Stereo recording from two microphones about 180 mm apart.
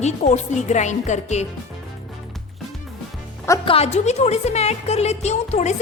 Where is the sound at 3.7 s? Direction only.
35° left (ahead or behind).